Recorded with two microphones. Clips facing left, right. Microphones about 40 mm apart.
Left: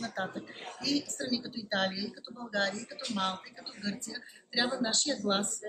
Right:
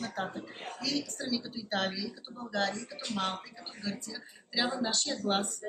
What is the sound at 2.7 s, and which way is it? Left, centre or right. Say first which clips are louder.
Speech: even; centre.